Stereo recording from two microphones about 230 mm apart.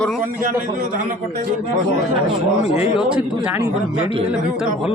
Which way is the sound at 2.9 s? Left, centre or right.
Centre.